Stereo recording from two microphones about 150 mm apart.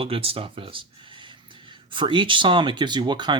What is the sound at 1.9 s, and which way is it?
Speech, 35° right (ahead or behind).